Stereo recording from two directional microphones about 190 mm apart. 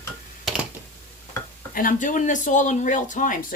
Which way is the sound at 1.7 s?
45° left (ahead or behind).